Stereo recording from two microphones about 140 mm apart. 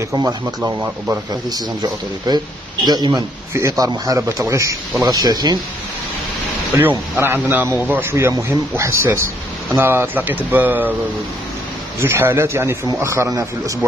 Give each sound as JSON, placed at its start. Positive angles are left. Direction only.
{"t": 0.1, "sound": "a man's voice", "side_deg": -25}
{"t": 0.8, "sound": "speech", "side_deg": -10}
{"t": 1.3, "sound": "a man's voice", "side_deg": -30}
{"t": 7.2, "sound": "a man's voice", "side_deg": -15}
{"t": 12.0, "sound": "a man's voice", "side_deg": -15}